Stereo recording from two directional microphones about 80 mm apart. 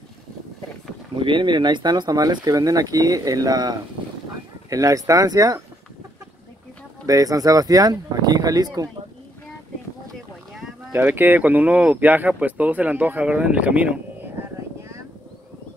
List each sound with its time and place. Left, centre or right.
1.1 s speech: right
7.1 s speech: right
10.9 s speech: right